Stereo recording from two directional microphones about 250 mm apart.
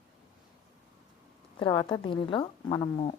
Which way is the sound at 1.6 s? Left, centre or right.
Centre.